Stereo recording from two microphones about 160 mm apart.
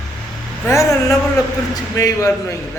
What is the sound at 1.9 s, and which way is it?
Speech, 20° left (ahead or behind).